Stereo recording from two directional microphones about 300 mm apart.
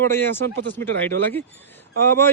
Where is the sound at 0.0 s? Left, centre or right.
Centre.